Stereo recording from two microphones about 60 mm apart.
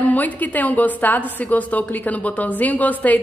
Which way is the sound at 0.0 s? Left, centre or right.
Left.